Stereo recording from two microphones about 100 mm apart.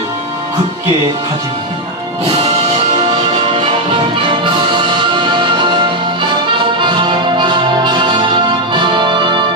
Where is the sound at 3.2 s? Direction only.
65° right (ahead or behind).